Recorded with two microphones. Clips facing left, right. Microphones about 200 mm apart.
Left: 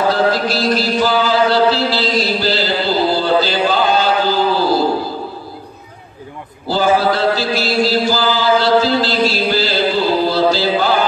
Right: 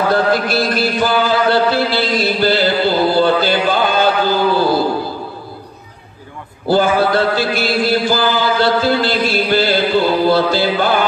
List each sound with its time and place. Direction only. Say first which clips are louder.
0.1 s chant: right 1 dB; 55° right (ahead or behind)
6.7 s mantra: right 1 dB; 55° right (ahead or behind)